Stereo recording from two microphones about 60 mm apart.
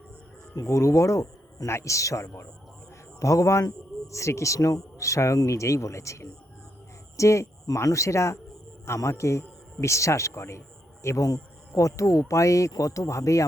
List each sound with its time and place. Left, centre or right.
0.5 s a man's voice: left